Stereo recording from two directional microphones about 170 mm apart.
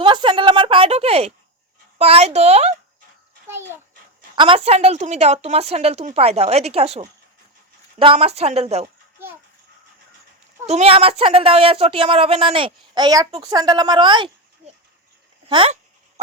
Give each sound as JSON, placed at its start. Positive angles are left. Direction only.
{"t": 0.0, "sound": "speech", "side_deg": -30}
{"t": 4.4, "sound": "speech", "side_deg": -30}
{"t": 10.7, "sound": "speech", "side_deg": -35}
{"t": 15.4, "sound": "speech", "side_deg": -30}